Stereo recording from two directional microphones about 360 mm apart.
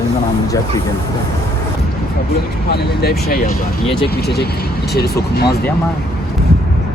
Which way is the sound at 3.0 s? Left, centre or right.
Left.